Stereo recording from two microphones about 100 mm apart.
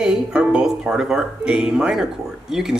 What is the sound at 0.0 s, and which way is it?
Speech, 5° right (ahead or behind).